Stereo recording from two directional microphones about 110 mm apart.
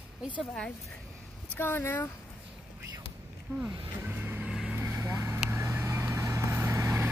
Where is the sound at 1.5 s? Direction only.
20° left (ahead or behind).